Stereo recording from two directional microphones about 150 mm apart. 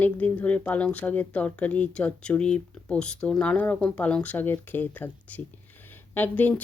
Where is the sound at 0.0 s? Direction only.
10° left (ahead or behind).